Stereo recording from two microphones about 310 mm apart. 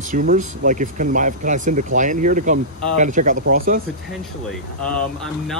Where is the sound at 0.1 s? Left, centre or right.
Right.